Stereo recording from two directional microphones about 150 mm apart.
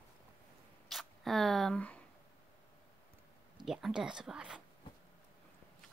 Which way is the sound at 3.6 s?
5° right (ahead or behind).